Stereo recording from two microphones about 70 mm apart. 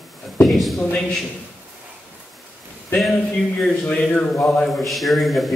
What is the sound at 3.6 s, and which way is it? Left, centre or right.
Speech, centre.